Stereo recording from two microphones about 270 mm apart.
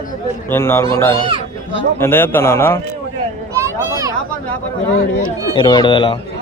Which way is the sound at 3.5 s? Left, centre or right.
Centre.